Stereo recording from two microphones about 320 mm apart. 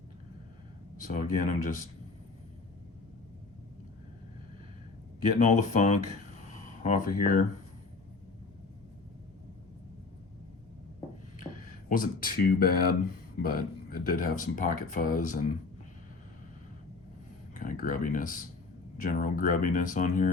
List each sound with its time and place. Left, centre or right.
1.0 s speech: left
5.4 s speech: left
11.9 s speech: left
17.5 s speech: left